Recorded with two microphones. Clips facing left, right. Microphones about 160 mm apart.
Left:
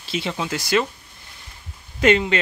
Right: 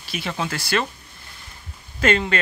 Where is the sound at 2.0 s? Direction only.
15° left (ahead or behind).